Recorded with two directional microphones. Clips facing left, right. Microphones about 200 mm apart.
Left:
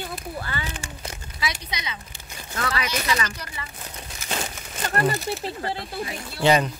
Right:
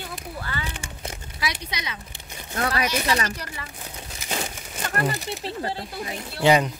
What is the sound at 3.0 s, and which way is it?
Speech, 35° right (ahead or behind).